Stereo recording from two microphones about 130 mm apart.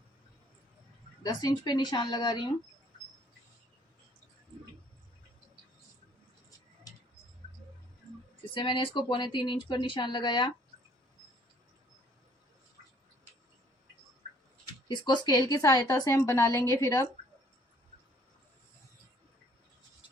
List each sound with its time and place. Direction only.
1.2 s speech: 30° left (ahead or behind)
8.5 s speech: 40° left (ahead or behind)
14.7 s speech: 35° left (ahead or behind)